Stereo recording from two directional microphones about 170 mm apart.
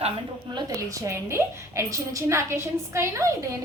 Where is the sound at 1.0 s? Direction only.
15° right (ahead or behind).